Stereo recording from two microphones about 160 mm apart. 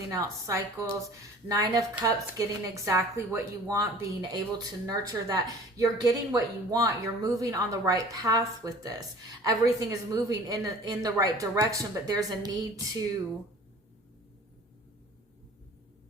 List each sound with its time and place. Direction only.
0.1 s a woman's voice: 20° right (ahead or behind)